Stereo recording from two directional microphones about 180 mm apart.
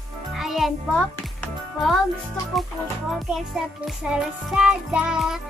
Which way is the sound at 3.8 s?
5° right (ahead or behind).